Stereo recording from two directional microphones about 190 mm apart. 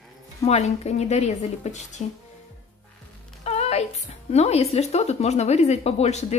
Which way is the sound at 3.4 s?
35° left (ahead or behind).